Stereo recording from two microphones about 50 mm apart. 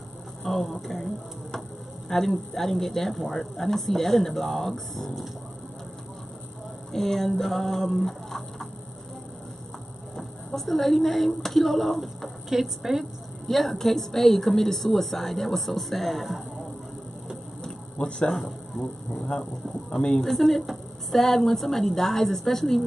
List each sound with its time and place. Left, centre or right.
0.4 s a woman's voice: centre
6.9 s a woman's voice: centre
10.1 s a woman's voice: centre
13.5 s a woman's voice: centre
17.6 s a sound: centre
18.3 s speech: centre
20.0 s speech: centre
20.2 s a woman's voice: centre